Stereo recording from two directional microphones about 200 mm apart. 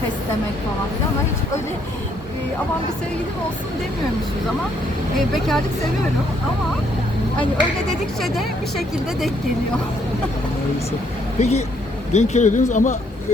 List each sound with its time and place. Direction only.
5.3 s speech: centre (ahead or behind)
7.9 s speech: centre (ahead or behind)
11.3 s speech: 35° left (ahead or behind)